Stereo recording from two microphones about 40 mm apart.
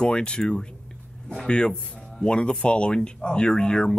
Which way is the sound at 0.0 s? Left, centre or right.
Left.